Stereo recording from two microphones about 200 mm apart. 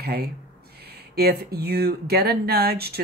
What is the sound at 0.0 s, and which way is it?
Speech, 50° right (ahead or behind).